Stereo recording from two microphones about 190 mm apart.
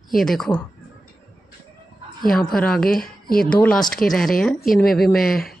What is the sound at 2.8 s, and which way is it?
Speech, 50° left (ahead or behind).